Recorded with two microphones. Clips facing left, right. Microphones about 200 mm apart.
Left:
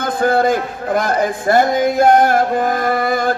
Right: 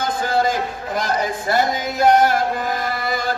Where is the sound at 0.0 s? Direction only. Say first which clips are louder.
Left 5 dB; 55° left (ahead or behind).